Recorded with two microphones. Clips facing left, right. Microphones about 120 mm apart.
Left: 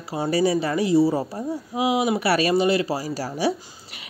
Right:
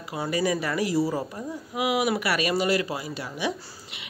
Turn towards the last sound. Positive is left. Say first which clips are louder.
# left 6 dB
turn(degrees=40)  # may be behind; listen again after turning